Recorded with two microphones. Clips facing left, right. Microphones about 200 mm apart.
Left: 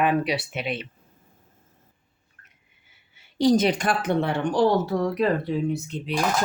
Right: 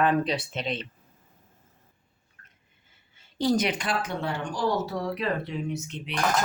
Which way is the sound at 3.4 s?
20° left (ahead or behind).